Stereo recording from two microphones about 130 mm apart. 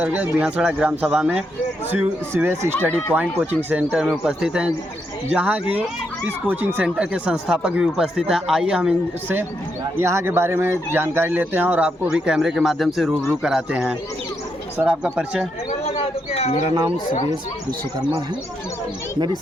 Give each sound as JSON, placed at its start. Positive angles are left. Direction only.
{"t": 0.0, "sound": "speech", "side_deg": -15}
{"t": 1.9, "sound": "speech", "side_deg": -15}
{"t": 10.0, "sound": "speech", "side_deg": -20}